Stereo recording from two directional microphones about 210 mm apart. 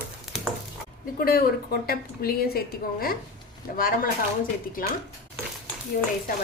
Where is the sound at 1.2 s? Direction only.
45° left (ahead or behind).